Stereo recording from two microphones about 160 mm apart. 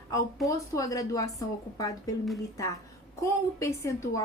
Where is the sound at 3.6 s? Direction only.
20° left (ahead or behind).